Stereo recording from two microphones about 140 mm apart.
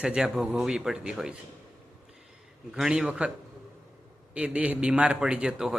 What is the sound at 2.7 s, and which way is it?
Speech, 5° right (ahead or behind).